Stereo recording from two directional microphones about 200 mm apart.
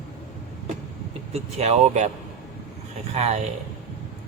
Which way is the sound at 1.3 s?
35° right (ahead or behind).